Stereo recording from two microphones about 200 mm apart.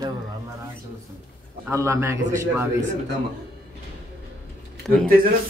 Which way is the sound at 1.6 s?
15° right (ahead or behind).